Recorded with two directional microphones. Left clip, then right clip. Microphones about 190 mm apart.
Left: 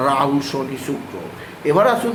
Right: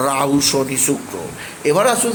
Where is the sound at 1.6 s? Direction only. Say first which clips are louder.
Even; 25° right (ahead or behind).